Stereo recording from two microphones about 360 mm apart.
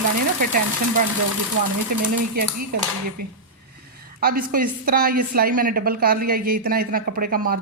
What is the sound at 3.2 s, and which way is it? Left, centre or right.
A woman's voice, right.